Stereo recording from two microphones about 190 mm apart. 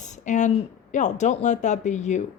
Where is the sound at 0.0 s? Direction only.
40° left (ahead or behind).